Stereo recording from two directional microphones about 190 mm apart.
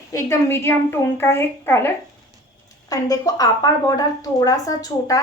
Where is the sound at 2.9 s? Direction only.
20° left (ahead or behind).